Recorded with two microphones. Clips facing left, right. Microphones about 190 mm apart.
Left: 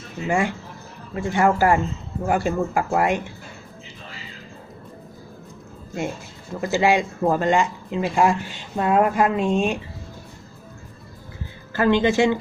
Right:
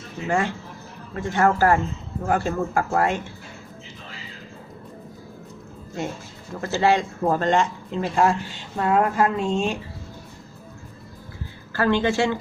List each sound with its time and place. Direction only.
0.3 s speech: 15° left (ahead or behind)
6.6 s speech: 15° left (ahead or behind)
11.7 s speech: 20° left (ahead or behind)